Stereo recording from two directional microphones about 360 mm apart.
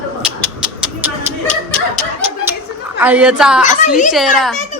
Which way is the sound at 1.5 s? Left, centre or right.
Centre.